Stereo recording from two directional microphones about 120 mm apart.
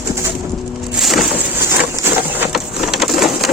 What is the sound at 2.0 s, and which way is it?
Wood, 15° right (ahead or behind).